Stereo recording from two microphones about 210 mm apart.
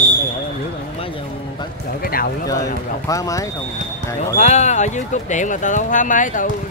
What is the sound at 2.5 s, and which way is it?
Speech, 15° left (ahead or behind).